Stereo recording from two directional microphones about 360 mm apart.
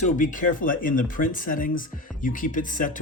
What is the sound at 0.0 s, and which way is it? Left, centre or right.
Speech, left.